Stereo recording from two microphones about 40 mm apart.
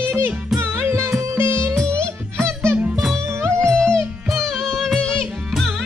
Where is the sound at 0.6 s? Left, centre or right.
Right.